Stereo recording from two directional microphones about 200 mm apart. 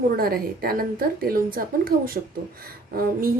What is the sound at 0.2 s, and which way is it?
Speech, 45° right (ahead or behind).